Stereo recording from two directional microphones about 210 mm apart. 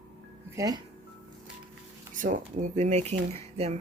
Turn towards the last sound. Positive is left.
turn(degrees=-30)  # may be behind; listen again after turning